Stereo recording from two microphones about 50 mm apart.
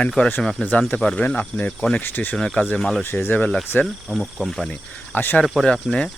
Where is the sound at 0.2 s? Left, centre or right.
Left.